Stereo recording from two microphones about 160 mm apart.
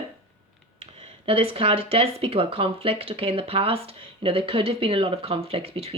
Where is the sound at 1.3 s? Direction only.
35° right (ahead or behind).